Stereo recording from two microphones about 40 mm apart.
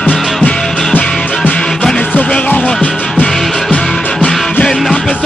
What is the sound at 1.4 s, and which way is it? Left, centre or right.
Music, left.